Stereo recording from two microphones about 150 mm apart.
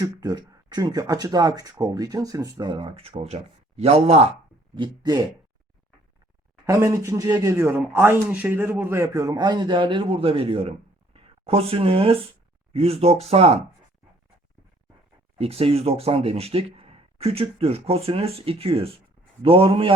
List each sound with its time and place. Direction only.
0.0 s speech: 25° right (ahead or behind); by 4.3 s 45° right (ahead or behind)
4.7 s speech: 25° right (ahead or behind)
6.7 s speech: 20° right (ahead or behind); by 13.6 s 45° right (ahead or behind)
15.4 s speech: 40° right (ahead or behind)